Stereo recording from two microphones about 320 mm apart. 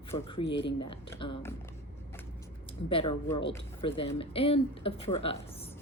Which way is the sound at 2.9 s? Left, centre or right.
Centre.